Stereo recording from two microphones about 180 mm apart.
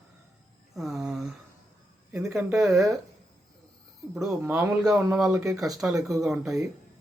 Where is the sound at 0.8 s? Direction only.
Centre (ahead or behind).